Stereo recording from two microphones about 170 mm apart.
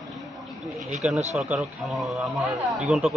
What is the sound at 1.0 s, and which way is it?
A man's voice, centre (ahead or behind).